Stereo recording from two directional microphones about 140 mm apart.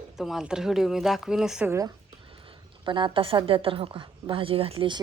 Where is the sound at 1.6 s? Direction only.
20° right (ahead or behind).